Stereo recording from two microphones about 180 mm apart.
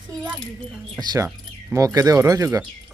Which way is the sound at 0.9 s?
20° right (ahead or behind).